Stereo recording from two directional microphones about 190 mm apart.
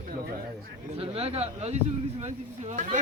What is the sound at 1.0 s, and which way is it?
Speech, 30° right (ahead or behind).